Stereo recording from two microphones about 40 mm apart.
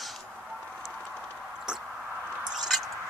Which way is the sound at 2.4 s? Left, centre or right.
Centre.